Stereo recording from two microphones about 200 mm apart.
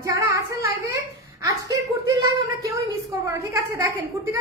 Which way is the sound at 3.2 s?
15° right (ahead or behind).